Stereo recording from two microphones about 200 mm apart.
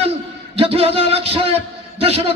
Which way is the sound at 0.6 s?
30° right (ahead or behind).